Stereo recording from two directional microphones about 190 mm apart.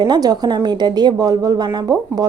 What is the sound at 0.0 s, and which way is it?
A woman's voice, 20° right (ahead or behind).